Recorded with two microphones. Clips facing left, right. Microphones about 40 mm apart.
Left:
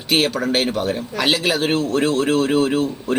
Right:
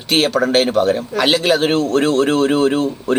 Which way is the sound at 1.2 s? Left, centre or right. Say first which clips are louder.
Right 4 dB; centre.